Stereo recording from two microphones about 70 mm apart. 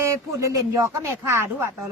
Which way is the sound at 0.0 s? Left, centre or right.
Right.